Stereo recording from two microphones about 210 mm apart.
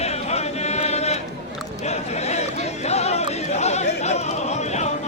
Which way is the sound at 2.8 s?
30° left (ahead or behind).